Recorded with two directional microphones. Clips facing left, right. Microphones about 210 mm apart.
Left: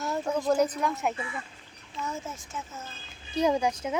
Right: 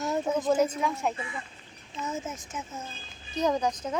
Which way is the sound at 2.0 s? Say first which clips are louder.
Right 1 dB; 20° right (ahead or behind).